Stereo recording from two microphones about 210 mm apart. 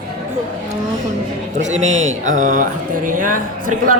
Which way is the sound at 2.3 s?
40° right (ahead or behind).